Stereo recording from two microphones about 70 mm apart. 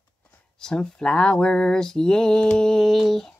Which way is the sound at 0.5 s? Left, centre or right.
Centre.